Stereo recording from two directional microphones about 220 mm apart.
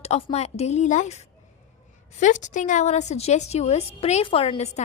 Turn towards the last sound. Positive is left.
turn(degrees=30)  # may be behind; listen again after turning